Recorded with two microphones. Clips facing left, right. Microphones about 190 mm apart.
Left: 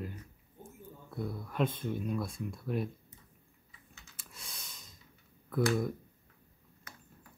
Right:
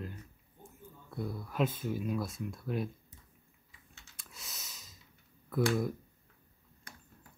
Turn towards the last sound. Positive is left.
turn(degrees=0)  # may be behind; listen again after turning